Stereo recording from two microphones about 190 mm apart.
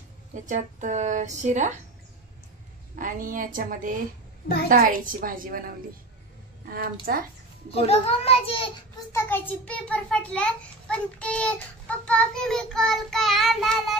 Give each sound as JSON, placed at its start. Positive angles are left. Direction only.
{"t": 0.3, "sound": "a woman's voice", "side_deg": -40}
{"t": 3.0, "sound": "a woman's voice", "side_deg": -45}
{"t": 7.7, "sound": "a child's voice", "side_deg": 30}
{"t": 9.1, "sound": "a child's voice", "side_deg": 10}